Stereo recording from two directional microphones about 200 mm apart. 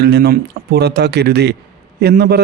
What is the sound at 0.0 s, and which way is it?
A man's voice, 55° right (ahead or behind).